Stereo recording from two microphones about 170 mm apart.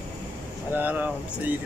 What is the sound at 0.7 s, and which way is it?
Speech, 10° right (ahead or behind).